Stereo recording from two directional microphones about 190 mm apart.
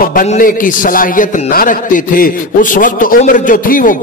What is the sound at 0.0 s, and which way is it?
A man's voice, 45° left (ahead or behind).